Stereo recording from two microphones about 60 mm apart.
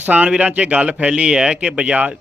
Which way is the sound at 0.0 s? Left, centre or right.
Right.